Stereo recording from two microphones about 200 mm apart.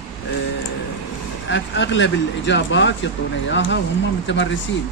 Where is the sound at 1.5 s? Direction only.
65° left (ahead or behind).